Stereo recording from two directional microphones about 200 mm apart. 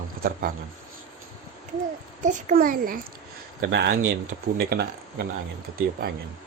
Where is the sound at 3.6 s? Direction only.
60° right (ahead or behind).